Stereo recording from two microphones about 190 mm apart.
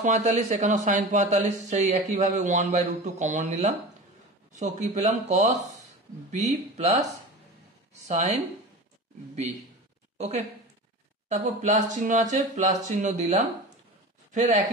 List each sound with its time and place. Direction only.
0.0 s speech: 40° right (ahead or behind)
10.1 s a woman's voice: 35° right (ahead or behind)